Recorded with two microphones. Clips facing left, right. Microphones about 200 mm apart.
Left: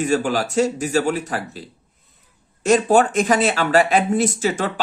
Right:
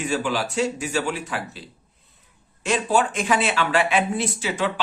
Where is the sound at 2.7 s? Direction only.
45° left (ahead or behind).